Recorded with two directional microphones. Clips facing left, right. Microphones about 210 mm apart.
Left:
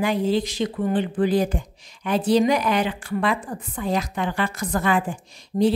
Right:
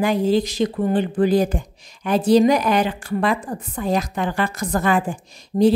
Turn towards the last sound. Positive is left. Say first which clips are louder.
# right 4 dB
turn(degrees=-40)  # may be behind; listen again after turning